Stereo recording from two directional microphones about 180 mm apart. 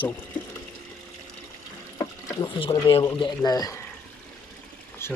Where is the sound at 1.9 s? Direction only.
25° left (ahead or behind).